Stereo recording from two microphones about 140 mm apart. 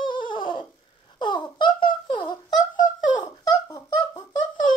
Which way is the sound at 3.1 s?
30° left (ahead or behind).